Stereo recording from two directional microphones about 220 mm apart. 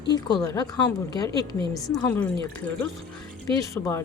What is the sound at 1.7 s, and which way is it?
Speech, 10° left (ahead or behind).